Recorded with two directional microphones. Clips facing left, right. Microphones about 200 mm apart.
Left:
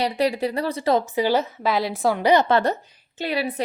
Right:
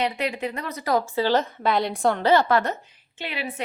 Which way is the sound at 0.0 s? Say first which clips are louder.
Left 4 dB; 35° left (ahead or behind).